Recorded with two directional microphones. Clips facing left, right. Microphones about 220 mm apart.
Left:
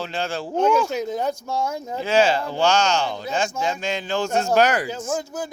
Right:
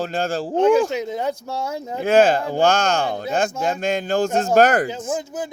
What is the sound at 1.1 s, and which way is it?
Speech, 25° right (ahead or behind).